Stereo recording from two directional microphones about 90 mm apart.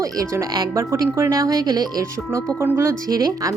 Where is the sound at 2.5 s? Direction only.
25° right (ahead or behind); by 3.6 s 40° right (ahead or behind).